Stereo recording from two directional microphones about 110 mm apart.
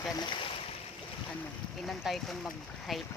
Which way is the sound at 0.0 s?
40° left (ahead or behind).